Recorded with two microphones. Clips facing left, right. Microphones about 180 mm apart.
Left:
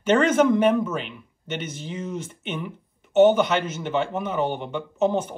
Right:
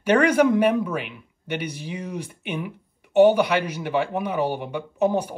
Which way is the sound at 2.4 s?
10° right (ahead or behind).